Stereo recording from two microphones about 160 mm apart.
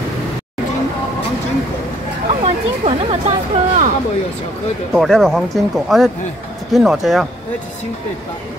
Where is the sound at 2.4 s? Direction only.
40° right (ahead or behind).